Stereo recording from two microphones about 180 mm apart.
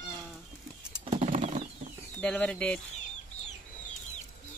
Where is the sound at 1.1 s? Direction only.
35° right (ahead or behind).